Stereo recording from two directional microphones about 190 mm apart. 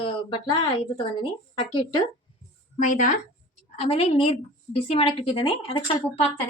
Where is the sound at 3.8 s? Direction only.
30° left (ahead or behind).